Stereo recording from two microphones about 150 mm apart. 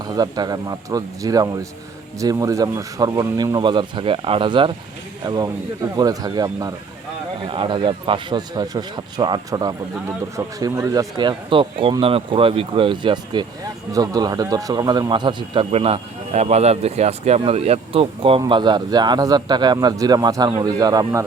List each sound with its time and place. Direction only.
0.0 s speech: 25° right (ahead or behind)
15.7 s speech: 45° right (ahead or behind); by 21.2 s 25° right (ahead or behind)